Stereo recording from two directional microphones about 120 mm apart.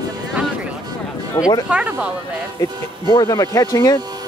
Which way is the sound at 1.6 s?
10° right (ahead or behind).